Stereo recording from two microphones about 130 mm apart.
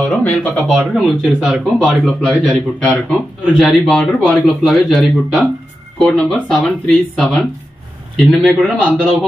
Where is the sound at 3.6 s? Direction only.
Centre (ahead or behind).